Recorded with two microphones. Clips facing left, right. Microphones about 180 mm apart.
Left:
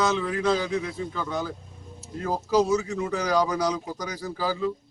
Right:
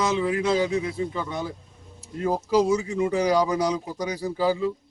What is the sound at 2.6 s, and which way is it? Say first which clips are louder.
Speech: right 2 dB; 10° right (ahead or behind).